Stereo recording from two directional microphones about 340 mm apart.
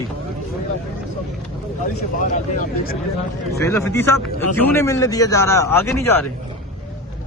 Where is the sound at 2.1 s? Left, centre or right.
Left.